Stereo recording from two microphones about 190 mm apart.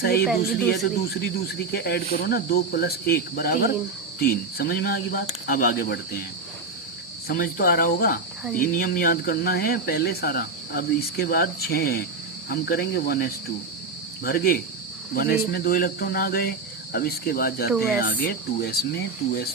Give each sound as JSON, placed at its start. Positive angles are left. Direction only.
{"t": 0.0, "sound": "cricket", "side_deg": 55}
{"t": 0.3, "sound": "speech", "side_deg": 0}
{"t": 1.7, "sound": "speech", "side_deg": 55}
{"t": 7.3, "sound": "speech", "side_deg": 50}
{"t": 12.5, "sound": "cricket", "side_deg": 55}
{"t": 14.3, "sound": "speech", "side_deg": 50}